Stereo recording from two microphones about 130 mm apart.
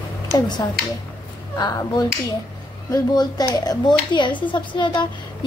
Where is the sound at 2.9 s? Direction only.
30° left (ahead or behind).